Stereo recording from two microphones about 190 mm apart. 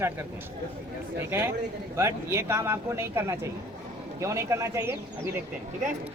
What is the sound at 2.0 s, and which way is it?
Speech, 15° right (ahead or behind).